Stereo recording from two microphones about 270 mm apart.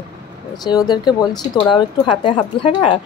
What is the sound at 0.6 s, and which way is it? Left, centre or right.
A woman's voice, centre.